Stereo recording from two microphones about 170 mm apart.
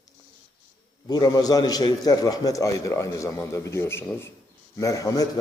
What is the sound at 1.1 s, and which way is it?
A man's voice, 25° left (ahead or behind).